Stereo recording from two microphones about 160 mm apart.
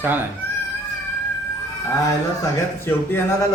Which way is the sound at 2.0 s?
15° left (ahead or behind).